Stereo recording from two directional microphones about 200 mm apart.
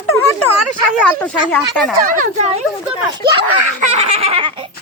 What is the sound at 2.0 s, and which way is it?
Speech, 40° right (ahead or behind).